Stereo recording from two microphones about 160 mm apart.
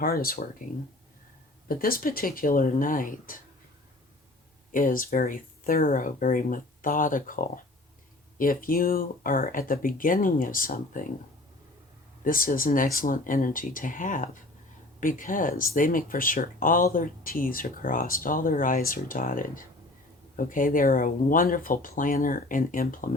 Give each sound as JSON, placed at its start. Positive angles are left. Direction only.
{"t": 0.0, "sound": "speech", "side_deg": 65}
{"t": 1.6, "sound": "speech", "side_deg": 65}
{"t": 4.7, "sound": "speech", "side_deg": 60}
{"t": 12.2, "sound": "speech", "side_deg": 60}